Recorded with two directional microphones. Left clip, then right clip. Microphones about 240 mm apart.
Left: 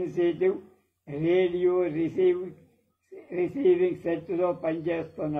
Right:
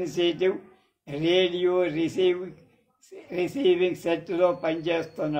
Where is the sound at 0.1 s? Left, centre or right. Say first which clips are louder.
Right 1 dB; right.